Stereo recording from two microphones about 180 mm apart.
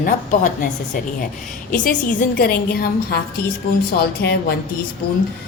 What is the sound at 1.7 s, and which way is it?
A woman's voice, 45° left (ahead or behind).